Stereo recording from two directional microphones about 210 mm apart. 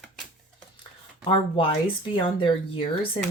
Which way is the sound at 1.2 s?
25° left (ahead or behind).